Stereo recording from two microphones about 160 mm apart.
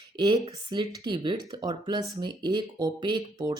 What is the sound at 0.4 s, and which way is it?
Speech, 30° right (ahead or behind).